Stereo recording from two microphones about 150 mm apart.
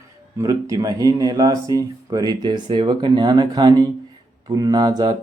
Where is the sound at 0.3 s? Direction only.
20° right (ahead or behind).